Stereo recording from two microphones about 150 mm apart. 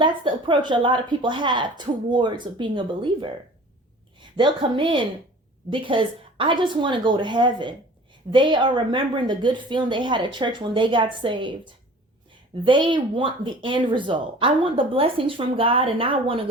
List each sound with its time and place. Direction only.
0.0 s a woman's voice: 35° right (ahead or behind)